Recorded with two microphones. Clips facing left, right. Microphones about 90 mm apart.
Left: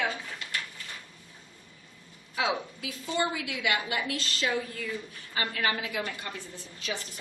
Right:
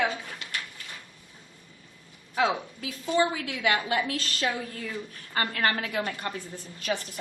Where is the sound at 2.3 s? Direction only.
45° right (ahead or behind).